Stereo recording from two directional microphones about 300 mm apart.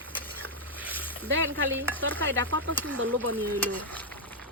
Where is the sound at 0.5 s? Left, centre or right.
Right.